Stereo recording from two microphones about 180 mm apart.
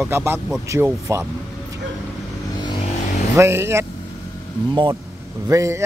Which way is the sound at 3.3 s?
15° right (ahead or behind).